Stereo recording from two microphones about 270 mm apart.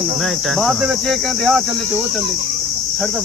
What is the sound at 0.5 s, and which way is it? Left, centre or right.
Speech, centre.